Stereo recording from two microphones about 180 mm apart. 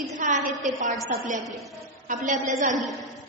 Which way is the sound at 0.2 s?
45° right (ahead or behind).